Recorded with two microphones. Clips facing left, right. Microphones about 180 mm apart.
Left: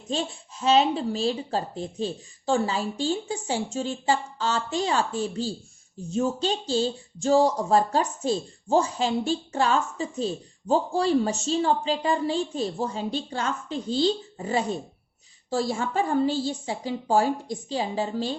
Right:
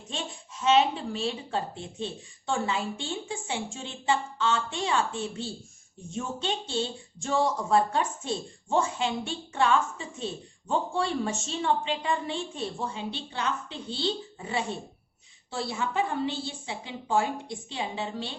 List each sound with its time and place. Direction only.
0.1 s speech: 35° left (ahead or behind)